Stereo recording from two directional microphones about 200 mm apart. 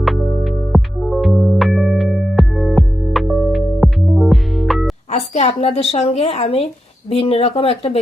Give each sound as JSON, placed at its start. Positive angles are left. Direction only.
{"t": 0.0, "sound": "music", "side_deg": 0}
{"t": 5.1, "sound": "a woman's voice", "side_deg": 35}